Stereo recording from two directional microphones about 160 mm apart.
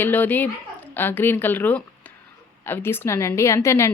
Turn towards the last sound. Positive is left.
turn(degrees=15)  # may be behind; listen again after turning